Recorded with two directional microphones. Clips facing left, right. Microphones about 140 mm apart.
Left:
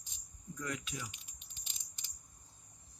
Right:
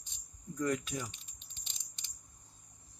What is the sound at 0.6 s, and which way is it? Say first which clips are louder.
Speech: right 8 dB; 50° right (ahead or behind).